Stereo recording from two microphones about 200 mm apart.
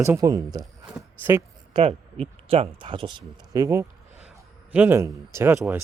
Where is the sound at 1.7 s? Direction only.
30° right (ahead or behind).